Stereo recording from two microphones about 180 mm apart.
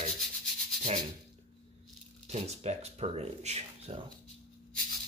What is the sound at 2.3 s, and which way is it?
Speech, 35° right (ahead or behind).